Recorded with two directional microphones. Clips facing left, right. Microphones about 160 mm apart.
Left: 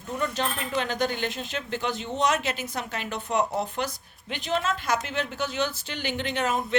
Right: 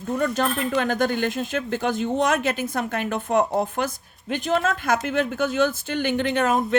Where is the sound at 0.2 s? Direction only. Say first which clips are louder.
Right 5 dB; 50° right (ahead or behind).